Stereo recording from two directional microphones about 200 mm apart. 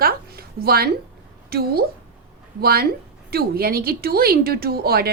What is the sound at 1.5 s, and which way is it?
A woman's voice, 50° right (ahead or behind).